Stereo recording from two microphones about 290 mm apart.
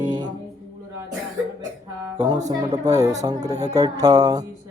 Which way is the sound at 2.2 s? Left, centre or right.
Centre.